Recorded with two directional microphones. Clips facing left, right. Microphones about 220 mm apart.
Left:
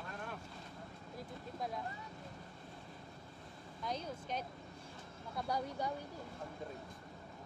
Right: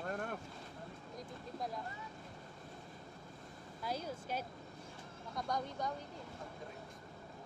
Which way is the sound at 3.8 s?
5° right (ahead or behind).